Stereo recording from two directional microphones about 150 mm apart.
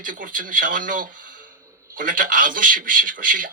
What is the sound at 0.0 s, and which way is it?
Speech, 65° right (ahead or behind).